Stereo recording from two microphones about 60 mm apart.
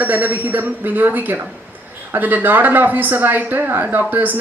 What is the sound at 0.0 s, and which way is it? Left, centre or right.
Speech, right.